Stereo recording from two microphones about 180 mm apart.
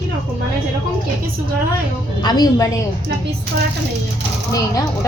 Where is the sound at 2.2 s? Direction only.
20° left (ahead or behind).